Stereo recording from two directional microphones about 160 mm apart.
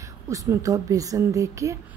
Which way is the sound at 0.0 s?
20° right (ahead or behind).